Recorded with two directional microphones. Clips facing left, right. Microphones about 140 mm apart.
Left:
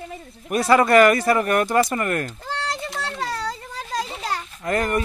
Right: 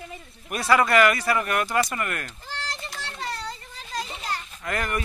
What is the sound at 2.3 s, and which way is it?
Children playing, 90° left.